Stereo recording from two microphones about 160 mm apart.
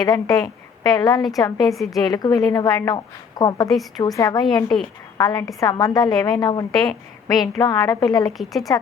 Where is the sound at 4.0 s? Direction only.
20° left (ahead or behind).